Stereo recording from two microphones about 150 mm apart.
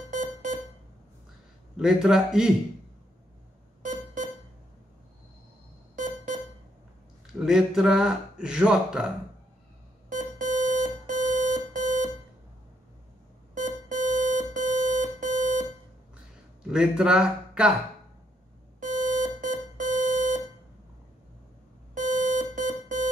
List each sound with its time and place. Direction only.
0.1 s smoke detector: 60° right (ahead or behind)
1.8 s speech: 5° right (ahead or behind)
3.8 s a sound: 60° right (ahead or behind)
7.3 s speech: 5° right (ahead or behind)
10.0 s alarm clock: 60° right (ahead or behind)
13.6 s alarm clock: 60° right (ahead or behind)
16.7 s speech: 5° right (ahead or behind)
18.8 s alarm clock: 60° right (ahead or behind)
21.9 s alarm clock: 60° right (ahead or behind)